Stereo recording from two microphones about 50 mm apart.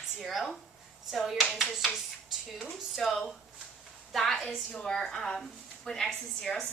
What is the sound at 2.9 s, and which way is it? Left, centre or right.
A woman's voice, centre.